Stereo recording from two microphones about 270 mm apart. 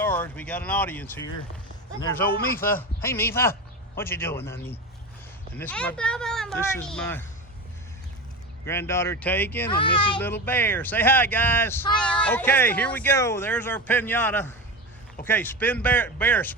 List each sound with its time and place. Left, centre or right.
0.0 s speech: centre
2.3 s speech: left
2.6 s a man's voice: centre
8.6 s speech: centre